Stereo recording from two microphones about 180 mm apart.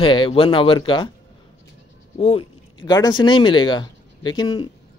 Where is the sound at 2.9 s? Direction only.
20° left (ahead or behind).